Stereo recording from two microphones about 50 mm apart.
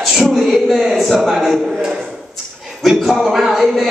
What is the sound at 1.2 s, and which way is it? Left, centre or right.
Speech, centre.